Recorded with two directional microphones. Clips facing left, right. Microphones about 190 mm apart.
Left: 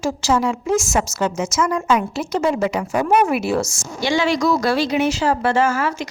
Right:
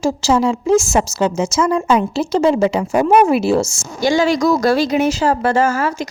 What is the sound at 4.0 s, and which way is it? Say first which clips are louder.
Speech: right 4 dB; 40° right (ahead or behind).